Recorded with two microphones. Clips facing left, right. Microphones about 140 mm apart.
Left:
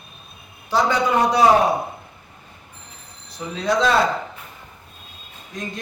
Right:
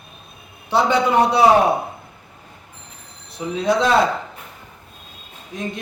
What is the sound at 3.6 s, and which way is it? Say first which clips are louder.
Speech: right 1 dB; 25° right (ahead or behind).